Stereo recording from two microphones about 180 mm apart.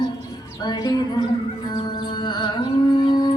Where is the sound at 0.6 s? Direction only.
20° left (ahead or behind).